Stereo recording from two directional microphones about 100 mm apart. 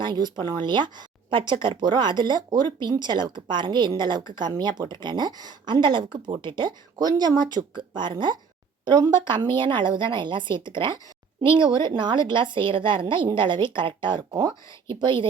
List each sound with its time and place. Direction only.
0.0 s speech: 50° right (ahead or behind)
14.8 s speech: 55° right (ahead or behind)